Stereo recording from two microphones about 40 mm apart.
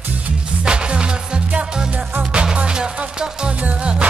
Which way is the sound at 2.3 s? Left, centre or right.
Right.